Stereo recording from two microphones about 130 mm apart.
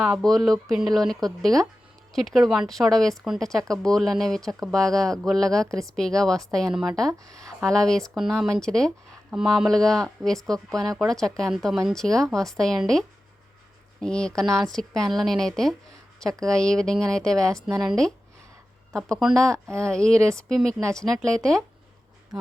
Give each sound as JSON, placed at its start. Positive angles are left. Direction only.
{"t": 0.0, "sound": "speech", "side_deg": 0}